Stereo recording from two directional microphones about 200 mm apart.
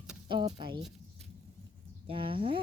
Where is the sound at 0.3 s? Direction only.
25° right (ahead or behind).